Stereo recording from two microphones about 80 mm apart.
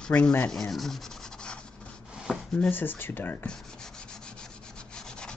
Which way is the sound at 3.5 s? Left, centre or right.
Centre.